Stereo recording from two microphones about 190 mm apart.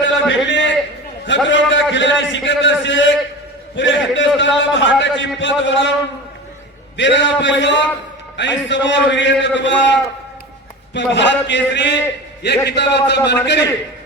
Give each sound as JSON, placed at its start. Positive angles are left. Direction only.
{"t": 0.0, "sound": "a sound", "side_deg": 70}
{"t": 1.5, "sound": "a man's voice", "side_deg": 70}
{"t": 6.9, "sound": "a man's voice", "side_deg": 70}